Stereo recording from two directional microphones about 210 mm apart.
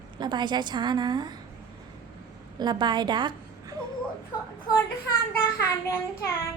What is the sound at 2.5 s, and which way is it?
A woman's voice, 20° right (ahead or behind).